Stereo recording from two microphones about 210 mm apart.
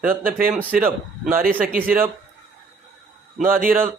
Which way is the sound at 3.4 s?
Centre (ahead or behind).